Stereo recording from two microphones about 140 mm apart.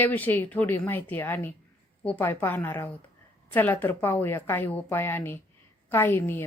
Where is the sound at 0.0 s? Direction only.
15° left (ahead or behind).